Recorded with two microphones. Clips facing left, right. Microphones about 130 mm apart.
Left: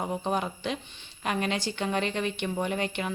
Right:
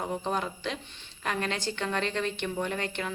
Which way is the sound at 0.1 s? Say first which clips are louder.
Left 2 dB; 15° left (ahead or behind).